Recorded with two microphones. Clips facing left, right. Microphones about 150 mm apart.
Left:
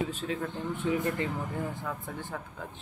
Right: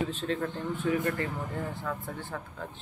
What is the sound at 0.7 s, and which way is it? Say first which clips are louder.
Speech: even; 20° left (ahead or behind).